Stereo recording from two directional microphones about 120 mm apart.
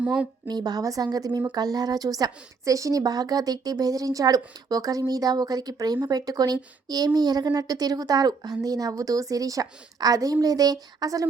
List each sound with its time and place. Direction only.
0.0 s a woman's voice: 10° right (ahead or behind)
0.4 s a woman's voice: 35° right (ahead or behind)